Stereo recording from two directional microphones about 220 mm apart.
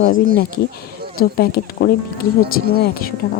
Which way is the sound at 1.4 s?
45° left (ahead or behind).